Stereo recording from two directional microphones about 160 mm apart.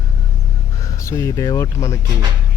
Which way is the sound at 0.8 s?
20° left (ahead or behind).